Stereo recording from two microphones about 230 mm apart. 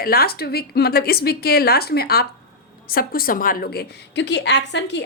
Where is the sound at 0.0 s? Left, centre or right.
Left.